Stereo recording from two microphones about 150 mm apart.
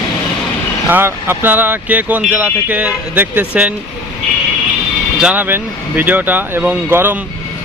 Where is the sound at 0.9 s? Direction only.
15° right (ahead or behind).